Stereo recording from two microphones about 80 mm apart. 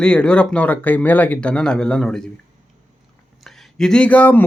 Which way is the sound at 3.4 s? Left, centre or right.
Centre.